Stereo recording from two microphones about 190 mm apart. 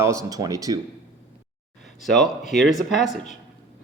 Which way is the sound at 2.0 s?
Centre (ahead or behind).